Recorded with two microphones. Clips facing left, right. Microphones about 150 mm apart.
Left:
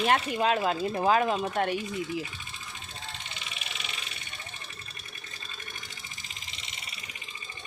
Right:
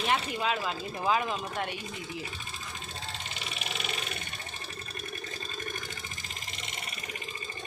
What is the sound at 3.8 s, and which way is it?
Vehicle, 50° right (ahead or behind).